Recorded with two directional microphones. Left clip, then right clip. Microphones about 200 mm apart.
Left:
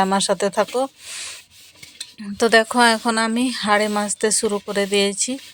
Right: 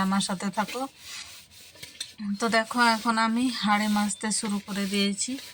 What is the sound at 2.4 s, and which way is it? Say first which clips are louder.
Speech: left 9 dB; 45° left (ahead or behind).